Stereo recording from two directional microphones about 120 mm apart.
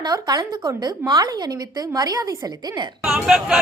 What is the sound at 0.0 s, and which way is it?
A woman's voice, 35° right (ahead or behind).